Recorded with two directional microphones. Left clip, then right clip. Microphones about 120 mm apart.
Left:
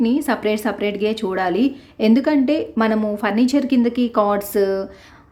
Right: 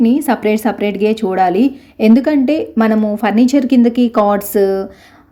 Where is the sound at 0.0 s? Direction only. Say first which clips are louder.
Right 5 dB; 25° right (ahead or behind).